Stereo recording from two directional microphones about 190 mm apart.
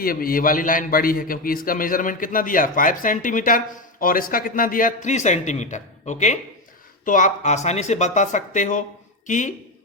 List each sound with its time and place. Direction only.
0.0 s a man's voice: 50° left (ahead or behind)